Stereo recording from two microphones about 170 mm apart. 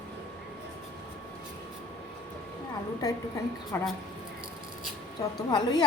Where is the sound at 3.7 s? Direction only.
15° left (ahead or behind).